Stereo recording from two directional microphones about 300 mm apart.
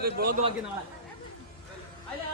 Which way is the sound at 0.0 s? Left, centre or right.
Right.